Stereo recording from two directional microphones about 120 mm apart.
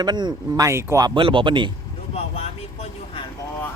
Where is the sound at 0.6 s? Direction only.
25° right (ahead or behind).